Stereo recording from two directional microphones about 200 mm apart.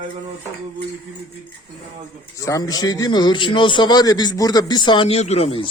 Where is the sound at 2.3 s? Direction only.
15° left (ahead or behind).